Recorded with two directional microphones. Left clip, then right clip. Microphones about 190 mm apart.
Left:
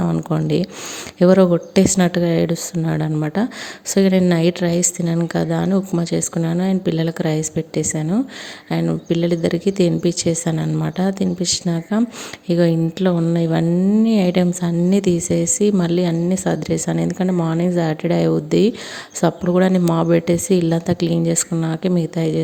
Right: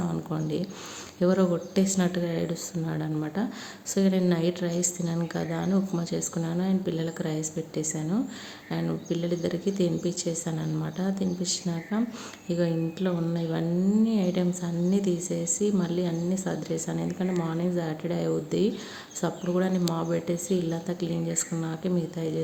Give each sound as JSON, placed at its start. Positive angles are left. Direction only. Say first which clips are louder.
{"t": 0.0, "sound": "a woman's voice", "louder": "left 10 dB", "side_deg": 40}